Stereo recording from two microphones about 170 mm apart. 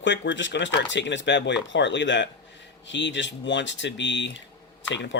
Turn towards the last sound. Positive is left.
turn(degrees=90)